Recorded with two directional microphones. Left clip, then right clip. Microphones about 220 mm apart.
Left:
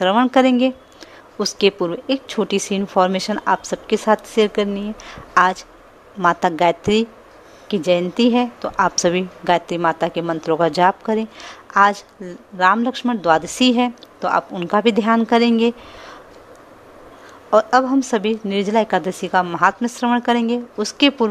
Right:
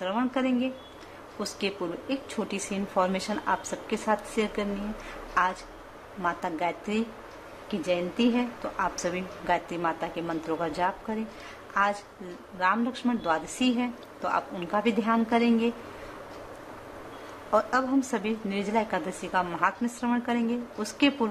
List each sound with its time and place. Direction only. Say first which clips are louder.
0.0 s a woman's voice: left 14 dB; 40° left (ahead or behind)
17.5 s a woman's voice: left 11 dB; 35° left (ahead or behind)